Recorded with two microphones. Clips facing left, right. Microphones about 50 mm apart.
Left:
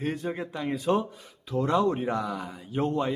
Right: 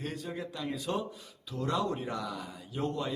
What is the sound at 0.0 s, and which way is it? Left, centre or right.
Speech, left.